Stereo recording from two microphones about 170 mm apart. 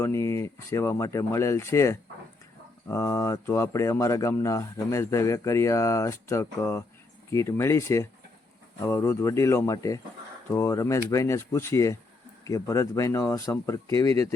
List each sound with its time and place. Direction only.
0.0 s speech: 15° left (ahead or behind)